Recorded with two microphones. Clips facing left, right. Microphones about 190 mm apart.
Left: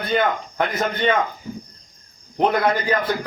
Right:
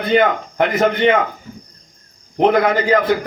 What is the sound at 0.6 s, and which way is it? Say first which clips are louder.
Speech: right 9 dB; 90° right.